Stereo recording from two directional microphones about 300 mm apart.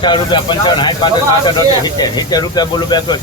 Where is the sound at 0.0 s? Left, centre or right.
Centre.